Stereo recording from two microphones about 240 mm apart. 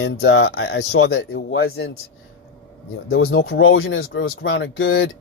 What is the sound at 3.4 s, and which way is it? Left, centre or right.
Speech, left.